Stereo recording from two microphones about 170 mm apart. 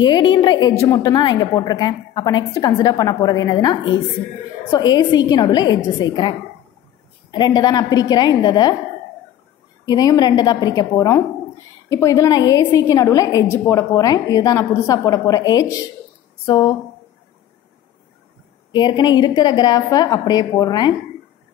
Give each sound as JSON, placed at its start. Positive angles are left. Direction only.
{"t": 0.0, "sound": "a woman's voice", "side_deg": 25}
{"t": 9.8, "sound": "a woman's voice", "side_deg": 25}
{"t": 18.7, "sound": "a woman's voice", "side_deg": 25}